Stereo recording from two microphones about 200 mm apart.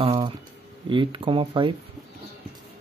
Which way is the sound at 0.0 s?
30° right (ahead or behind).